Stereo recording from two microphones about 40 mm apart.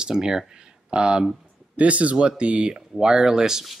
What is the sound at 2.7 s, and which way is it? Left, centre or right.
Speech, centre.